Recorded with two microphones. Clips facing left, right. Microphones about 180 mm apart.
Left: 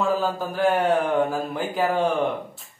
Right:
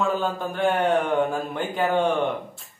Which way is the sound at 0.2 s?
Centre (ahead or behind).